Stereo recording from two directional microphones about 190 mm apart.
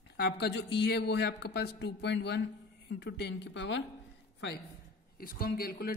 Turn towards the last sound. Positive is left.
turn(degrees=50)  # may be behind; listen again after turning